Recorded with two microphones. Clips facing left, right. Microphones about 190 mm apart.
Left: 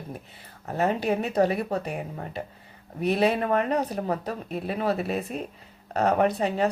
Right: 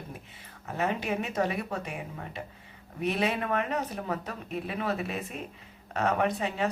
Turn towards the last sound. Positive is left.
turn(degrees=35)  # may be behind; listen again after turning